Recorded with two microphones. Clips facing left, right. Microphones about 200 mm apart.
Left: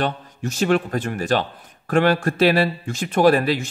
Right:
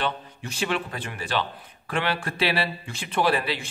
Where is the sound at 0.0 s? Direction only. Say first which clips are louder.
Left 5 dB; 45° left (ahead or behind).